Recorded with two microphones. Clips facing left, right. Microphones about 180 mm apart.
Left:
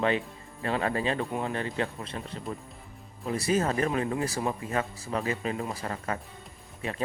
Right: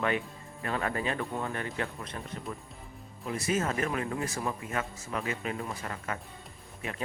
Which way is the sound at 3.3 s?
35° left (ahead or behind).